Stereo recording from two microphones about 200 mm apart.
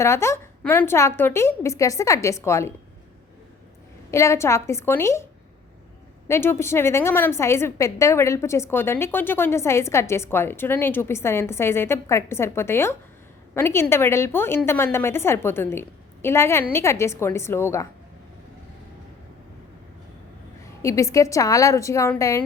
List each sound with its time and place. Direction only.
0.0 s a woman's voice: 15° left (ahead or behind)
4.1 s a woman's voice: 15° left (ahead or behind)
6.2 s a woman's voice: 10° left (ahead or behind)
20.8 s a woman's voice: 15° left (ahead or behind)